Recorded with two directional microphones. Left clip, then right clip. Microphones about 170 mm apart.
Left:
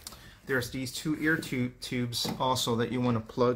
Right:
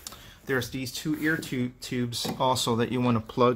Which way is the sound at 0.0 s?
45° right (ahead or behind).